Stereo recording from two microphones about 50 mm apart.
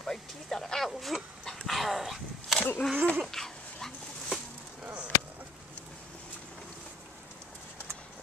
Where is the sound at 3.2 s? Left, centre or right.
Centre.